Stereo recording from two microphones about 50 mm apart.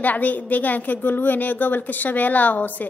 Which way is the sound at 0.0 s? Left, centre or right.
Left.